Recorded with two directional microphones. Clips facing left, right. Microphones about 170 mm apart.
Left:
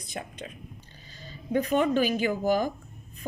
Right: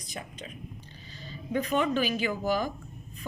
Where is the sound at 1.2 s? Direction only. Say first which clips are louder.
Left 3 dB; 45° left (ahead or behind).